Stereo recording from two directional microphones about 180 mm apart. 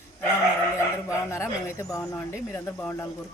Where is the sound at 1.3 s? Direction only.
15° left (ahead or behind).